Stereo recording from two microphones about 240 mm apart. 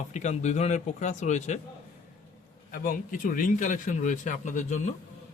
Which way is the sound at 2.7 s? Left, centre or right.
Left.